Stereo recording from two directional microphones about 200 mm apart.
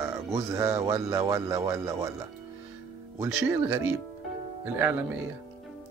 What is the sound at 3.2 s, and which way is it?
Speech, 15° right (ahead or behind).